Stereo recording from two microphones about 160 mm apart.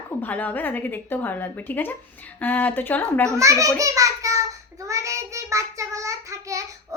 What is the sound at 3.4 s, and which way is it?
A child's voice, 20° right (ahead or behind).